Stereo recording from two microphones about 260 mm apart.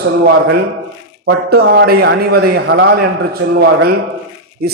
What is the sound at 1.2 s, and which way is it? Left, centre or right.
A man's voice, right.